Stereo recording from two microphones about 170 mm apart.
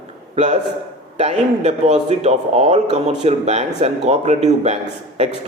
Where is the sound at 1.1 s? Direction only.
40° right (ahead or behind).